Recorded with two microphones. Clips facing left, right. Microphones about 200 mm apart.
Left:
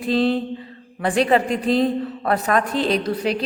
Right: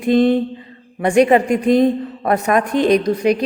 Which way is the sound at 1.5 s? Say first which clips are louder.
Right 5 dB; 50° right (ahead or behind).